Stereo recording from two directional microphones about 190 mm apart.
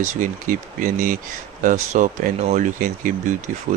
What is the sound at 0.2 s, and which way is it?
Speech, 45° right (ahead or behind).